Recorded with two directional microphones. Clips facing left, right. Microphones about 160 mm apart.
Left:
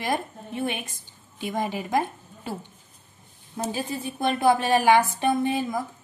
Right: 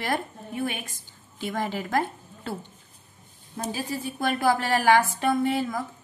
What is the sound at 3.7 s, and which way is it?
A woman's voice, 20° left (ahead or behind).